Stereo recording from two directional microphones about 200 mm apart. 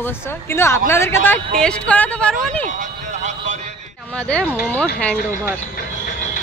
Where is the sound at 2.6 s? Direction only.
35° right (ahead or behind).